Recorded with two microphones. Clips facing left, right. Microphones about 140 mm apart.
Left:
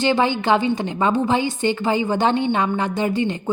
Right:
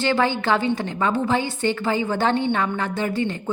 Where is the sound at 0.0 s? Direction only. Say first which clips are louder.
Left 2 dB; 15° left (ahead or behind).